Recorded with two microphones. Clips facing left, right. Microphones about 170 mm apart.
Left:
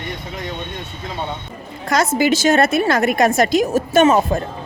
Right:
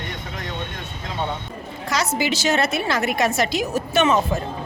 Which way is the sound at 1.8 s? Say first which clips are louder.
Left 7 dB; 50° left (ahead or behind).